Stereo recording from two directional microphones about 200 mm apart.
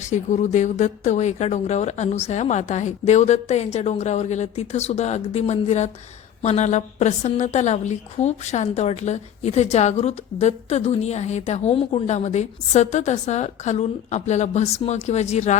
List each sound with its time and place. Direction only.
0.1 s a woman's voice: 35° left (ahead or behind)